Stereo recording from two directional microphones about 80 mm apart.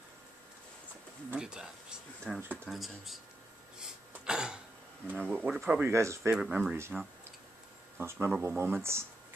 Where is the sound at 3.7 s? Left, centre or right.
Centre.